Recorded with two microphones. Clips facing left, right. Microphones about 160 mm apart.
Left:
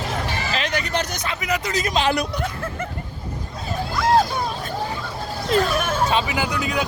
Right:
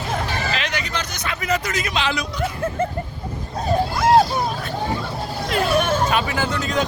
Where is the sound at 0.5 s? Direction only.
45° left (ahead or behind).